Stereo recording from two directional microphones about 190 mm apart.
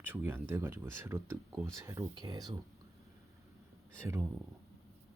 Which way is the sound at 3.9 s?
15° right (ahead or behind).